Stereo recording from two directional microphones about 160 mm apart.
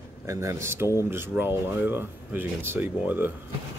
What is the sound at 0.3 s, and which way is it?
Speech, 20° right (ahead or behind).